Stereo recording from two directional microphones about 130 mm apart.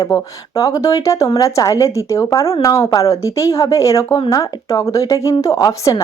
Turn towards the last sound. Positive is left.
turn(degrees=25)  # may be behind; listen again after turning